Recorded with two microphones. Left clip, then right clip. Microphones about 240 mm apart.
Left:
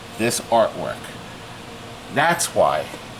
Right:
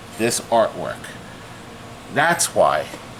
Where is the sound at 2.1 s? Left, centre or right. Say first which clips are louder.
Right 1 dB; centre.